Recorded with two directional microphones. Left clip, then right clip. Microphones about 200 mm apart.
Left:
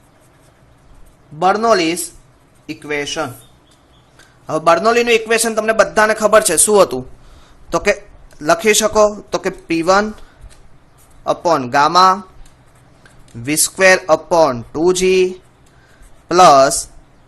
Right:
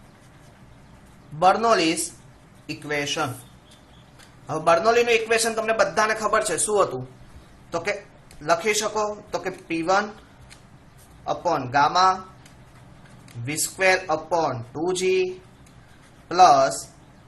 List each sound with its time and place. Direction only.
1.4 s a man's voice: 35° left (ahead or behind)
4.4 s a man's voice: 45° left (ahead or behind)
11.3 s a man's voice: 50° left (ahead or behind)
13.4 s a man's voice: 50° left (ahead or behind)
16.3 s a man's voice: 55° left (ahead or behind)